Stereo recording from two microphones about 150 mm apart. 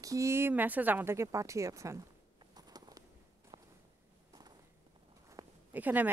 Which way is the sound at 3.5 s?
40° right (ahead or behind).